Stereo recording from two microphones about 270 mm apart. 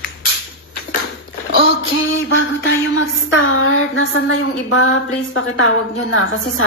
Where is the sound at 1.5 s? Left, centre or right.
Left.